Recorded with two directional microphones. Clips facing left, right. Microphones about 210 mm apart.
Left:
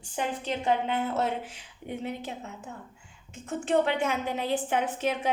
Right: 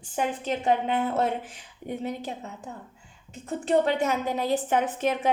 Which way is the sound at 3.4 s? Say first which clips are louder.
Right 2 dB; 40° right (ahead or behind).